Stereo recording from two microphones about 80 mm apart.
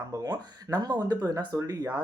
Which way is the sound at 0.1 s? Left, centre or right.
Right.